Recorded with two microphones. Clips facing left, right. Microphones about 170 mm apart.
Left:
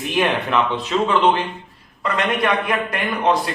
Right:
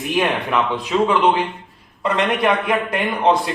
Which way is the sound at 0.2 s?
10° right (ahead or behind).